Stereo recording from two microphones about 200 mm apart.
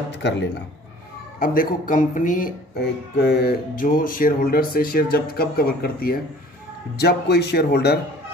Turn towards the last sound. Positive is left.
turn(degrees=55)  # may be behind; listen again after turning